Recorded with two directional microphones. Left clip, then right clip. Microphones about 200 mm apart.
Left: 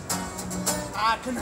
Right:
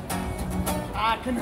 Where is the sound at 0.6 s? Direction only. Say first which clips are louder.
Left 1 dB; 5° left (ahead or behind).